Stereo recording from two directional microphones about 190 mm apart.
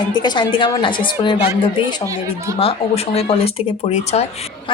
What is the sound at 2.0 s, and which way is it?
Speech, 15° right (ahead or behind).